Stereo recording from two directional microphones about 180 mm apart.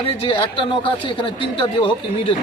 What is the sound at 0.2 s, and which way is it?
A man's voice, 30° left (ahead or behind).